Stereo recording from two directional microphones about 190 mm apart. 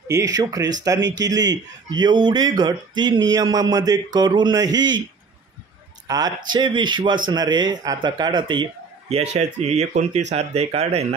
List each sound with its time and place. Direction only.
0.1 s speech: 20° right (ahead or behind)
6.0 s speech: 20° right (ahead or behind)
9.1 s speech: 35° right (ahead or behind)